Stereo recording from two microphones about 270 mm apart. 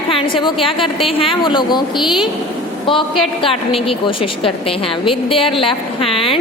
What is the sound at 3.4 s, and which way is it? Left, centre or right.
A woman's voice, left.